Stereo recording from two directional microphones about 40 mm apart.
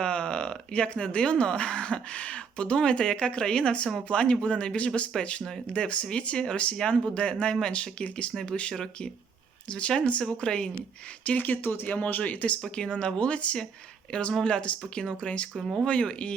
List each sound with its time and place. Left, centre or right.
0.0 s speech: left
5.4 s speech: centre
5.7 s speech: left
9.6 s speech: left
11.3 s speech: left
11.9 s speech: left
12.7 s speech: left